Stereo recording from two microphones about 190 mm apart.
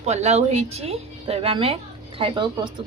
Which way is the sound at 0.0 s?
35° right (ahead or behind).